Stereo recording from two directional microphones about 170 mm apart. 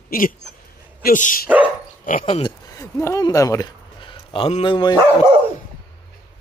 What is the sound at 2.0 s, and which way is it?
Dog, 55° left (ahead or behind).